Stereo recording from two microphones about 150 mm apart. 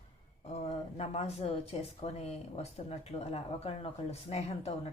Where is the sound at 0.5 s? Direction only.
45° left (ahead or behind).